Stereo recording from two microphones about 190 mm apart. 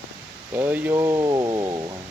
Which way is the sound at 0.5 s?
10° right (ahead or behind).